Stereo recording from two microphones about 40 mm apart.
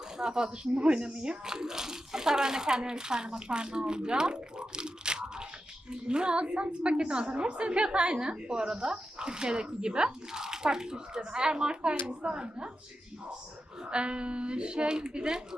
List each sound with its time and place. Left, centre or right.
0.2 s speech: centre
13.8 s speech: right